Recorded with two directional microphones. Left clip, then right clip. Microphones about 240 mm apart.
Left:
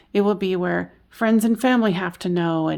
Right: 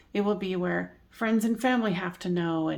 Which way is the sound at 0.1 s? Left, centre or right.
Left.